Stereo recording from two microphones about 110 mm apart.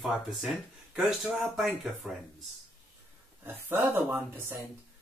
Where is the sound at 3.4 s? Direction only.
20° right (ahead or behind).